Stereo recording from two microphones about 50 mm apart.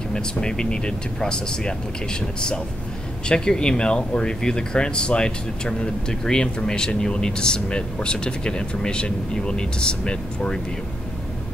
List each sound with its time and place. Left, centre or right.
0.1 s speech: centre